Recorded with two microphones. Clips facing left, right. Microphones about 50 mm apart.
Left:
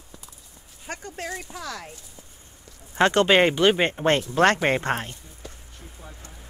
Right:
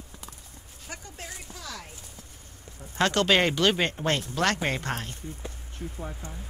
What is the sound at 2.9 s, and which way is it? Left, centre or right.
Speech, left.